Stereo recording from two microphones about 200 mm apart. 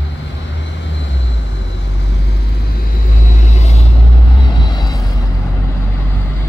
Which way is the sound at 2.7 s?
40° left (ahead or behind).